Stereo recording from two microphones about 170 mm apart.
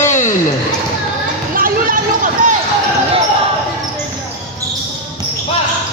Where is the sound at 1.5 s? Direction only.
55° right (ahead or behind).